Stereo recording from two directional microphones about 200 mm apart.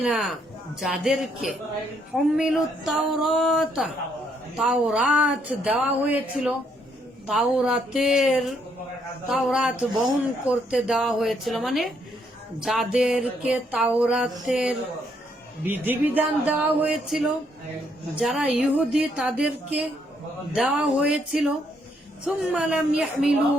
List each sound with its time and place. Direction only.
0.0 s music: centre (ahead or behind)
15.6 s speech: 10° right (ahead or behind)
18.1 s music: 5° right (ahead or behind)